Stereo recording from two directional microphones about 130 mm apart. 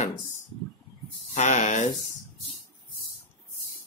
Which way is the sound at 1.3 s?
65° left (ahead or behind).